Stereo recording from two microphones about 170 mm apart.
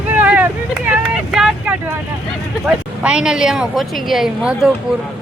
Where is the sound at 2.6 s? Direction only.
5° right (ahead or behind).